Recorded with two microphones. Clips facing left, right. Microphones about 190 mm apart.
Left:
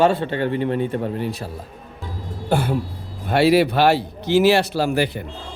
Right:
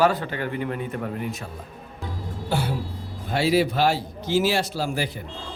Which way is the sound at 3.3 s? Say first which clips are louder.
Left 6 dB; 65° left (ahead or behind).